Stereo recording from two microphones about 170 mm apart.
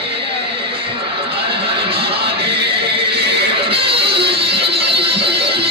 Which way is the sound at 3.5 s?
30° right (ahead or behind).